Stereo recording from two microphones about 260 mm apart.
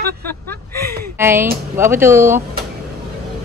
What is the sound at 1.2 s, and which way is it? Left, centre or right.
Speech, centre.